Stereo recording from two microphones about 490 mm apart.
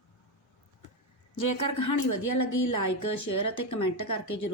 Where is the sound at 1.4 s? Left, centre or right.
Left.